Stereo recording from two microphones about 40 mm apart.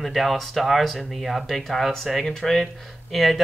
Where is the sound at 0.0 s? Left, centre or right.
Centre.